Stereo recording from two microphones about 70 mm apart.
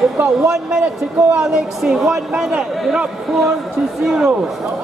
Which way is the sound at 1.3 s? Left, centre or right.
Centre.